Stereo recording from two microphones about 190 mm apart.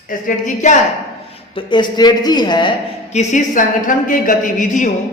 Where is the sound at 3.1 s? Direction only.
40° left (ahead or behind).